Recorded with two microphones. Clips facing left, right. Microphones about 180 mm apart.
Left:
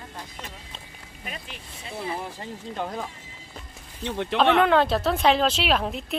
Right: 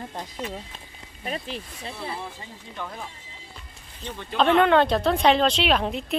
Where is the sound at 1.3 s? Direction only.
35° right (ahead or behind).